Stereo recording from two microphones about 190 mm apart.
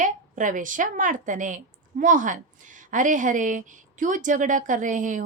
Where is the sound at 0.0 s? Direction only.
40° right (ahead or behind).